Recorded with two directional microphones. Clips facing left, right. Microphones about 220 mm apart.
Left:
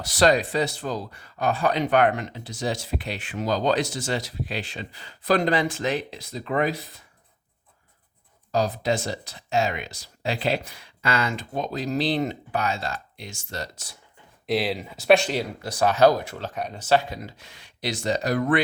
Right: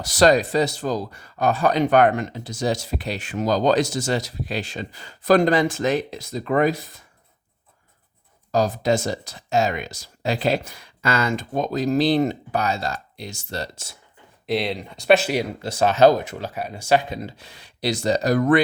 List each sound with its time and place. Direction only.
0.0 s speech: 45° right (ahead or behind)
8.5 s speech: 45° right (ahead or behind); by 13.9 s 30° right (ahead or behind)
14.4 s speech: centre (ahead or behind)
15.6 s speech: 25° right (ahead or behind)
16.5 s speech: 5° right (ahead or behind)
17.2 s speech: 30° right (ahead or behind)